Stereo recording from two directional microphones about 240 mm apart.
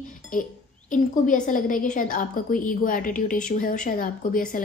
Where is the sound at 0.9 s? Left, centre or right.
Left.